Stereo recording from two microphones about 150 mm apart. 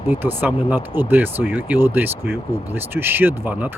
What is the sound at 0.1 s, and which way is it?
Speech, 15° right (ahead or behind).